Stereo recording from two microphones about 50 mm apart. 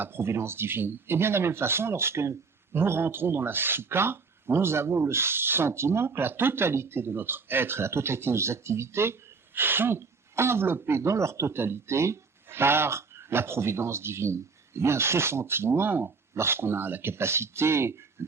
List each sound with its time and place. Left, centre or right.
0.0 s speech: right
2.7 s speech: right
9.6 s speech: right
11.5 s speech: right
16.3 s speech: right
18.2 s a sound: right